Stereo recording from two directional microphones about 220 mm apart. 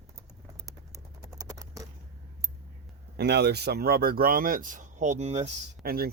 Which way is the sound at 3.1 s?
50° right (ahead or behind).